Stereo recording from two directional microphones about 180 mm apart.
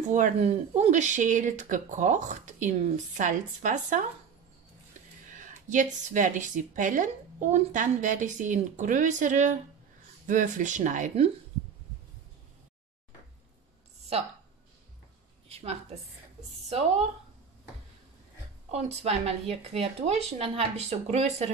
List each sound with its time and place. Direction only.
0.1 s speech: 40° right (ahead or behind)
5.2 s speech: 45° right (ahead or behind)
15.4 s a sound: 35° right (ahead or behind)
18.7 s speech: 35° right (ahead or behind)